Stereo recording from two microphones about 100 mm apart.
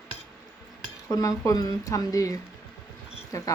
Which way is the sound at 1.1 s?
35° left (ahead or behind).